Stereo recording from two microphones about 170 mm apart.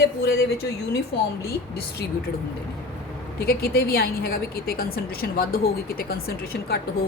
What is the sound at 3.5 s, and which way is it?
A woman's voice, 65° left (ahead or behind).